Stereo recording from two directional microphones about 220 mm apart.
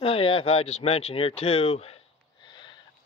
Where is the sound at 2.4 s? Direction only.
20° left (ahead or behind).